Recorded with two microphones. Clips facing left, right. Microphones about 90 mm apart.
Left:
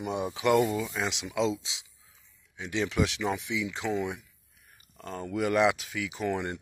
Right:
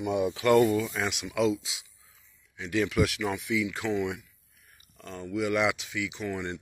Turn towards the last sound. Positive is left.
turn(degrees=40)  # may be behind; listen again after turning